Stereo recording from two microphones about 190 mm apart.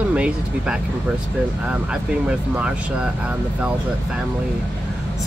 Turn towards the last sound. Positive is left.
turn(degrees=-5)  # may be behind; listen again after turning